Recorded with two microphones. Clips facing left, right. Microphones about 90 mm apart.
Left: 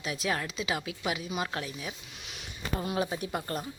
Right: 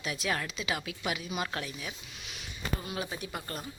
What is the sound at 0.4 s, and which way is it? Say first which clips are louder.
Speech: left 2 dB; 30° left (ahead or behind).